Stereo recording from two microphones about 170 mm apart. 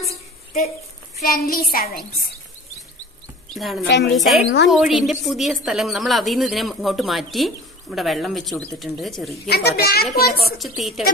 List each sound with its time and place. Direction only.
1.3 s a woman's voice: 60° left (ahead or behind)
3.5 s a woman's voice: centre (ahead or behind)
9.5 s a woman's voice: 70° left (ahead or behind)
10.6 s a woman's voice: centre (ahead or behind)